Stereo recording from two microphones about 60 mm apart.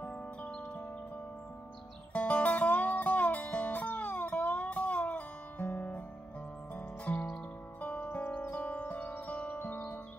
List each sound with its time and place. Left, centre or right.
0.0 s music: centre
2.1 s music: left
9.6 s music: left